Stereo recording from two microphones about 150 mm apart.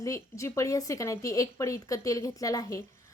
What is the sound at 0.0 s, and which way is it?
A woman's voice, 20° left (ahead or behind).